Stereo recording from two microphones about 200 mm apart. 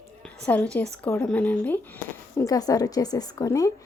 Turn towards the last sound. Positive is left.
turn(degrees=15)  # may be behind; listen again after turning